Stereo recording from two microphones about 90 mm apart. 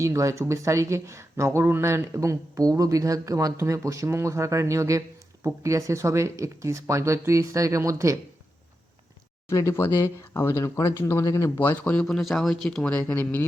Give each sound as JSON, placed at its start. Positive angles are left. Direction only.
{"t": 0.0, "sound": "speech", "side_deg": -35}
{"t": 9.5, "sound": "speech", "side_deg": 35}
{"t": 11.5, "sound": "speech", "side_deg": 20}
{"t": 12.0, "sound": "speech", "side_deg": 5}
{"t": 12.9, "sound": "speech", "side_deg": 15}